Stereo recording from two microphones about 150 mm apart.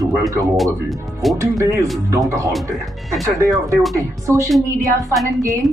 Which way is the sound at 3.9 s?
20° right (ahead or behind).